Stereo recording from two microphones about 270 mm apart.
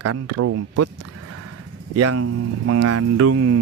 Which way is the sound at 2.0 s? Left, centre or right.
Right.